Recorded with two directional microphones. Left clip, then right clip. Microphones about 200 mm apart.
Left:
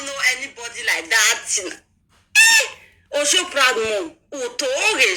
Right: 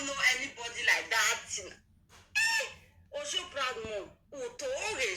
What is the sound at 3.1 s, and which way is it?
A man's voice, 60° left (ahead or behind).